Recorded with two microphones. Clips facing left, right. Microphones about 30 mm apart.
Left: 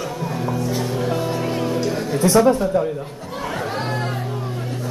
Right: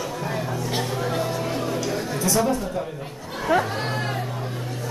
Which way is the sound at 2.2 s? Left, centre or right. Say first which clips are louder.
Left 8 dB; left.